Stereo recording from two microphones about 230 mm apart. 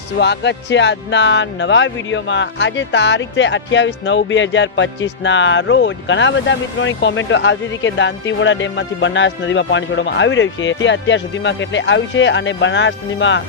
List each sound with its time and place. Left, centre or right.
0.2 s speech: left